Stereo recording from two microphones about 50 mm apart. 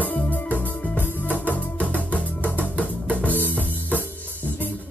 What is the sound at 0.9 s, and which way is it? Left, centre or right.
Music, right.